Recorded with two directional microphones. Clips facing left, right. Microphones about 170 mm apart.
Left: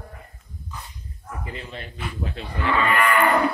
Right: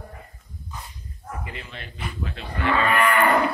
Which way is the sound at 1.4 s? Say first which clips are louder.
Left 3 dB; 35° left (ahead or behind).